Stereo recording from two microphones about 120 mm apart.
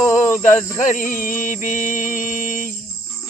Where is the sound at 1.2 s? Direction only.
90° left.